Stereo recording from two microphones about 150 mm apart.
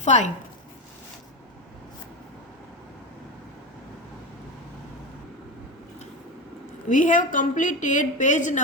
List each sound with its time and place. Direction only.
0.0 s speech: 50° left (ahead or behind)
6.8 s a woman's voice: 60° left (ahead or behind)